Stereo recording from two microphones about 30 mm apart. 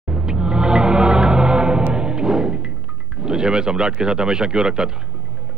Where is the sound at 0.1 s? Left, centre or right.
Right.